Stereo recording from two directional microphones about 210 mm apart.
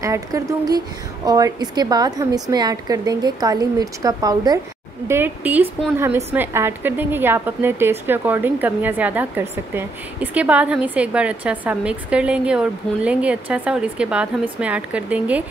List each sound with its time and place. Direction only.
0.0 s a woman's voice: 15° right (ahead or behind)